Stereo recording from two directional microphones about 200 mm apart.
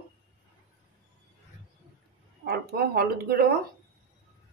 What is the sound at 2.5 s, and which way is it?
Speech, 50° right (ahead or behind).